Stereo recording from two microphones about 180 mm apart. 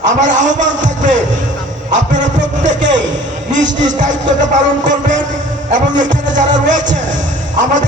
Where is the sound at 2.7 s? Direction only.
90° right.